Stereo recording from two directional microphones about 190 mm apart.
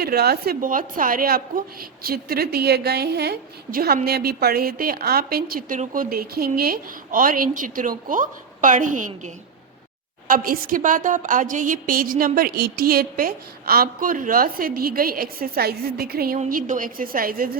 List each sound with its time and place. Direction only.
0.0 s a woman's voice: 55° right (ahead or behind)